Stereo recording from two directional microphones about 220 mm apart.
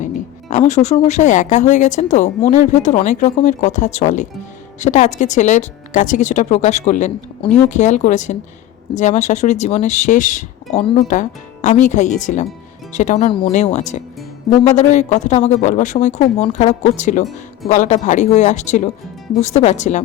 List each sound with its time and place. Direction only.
0.0 s speech: 35° left (ahead or behind)
7.4 s speech: 5° left (ahead or behind)
7.7 s speech: 35° left (ahead or behind)